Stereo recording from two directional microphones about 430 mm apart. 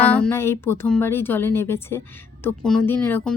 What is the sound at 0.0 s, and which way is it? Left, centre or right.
A woman's voice, centre.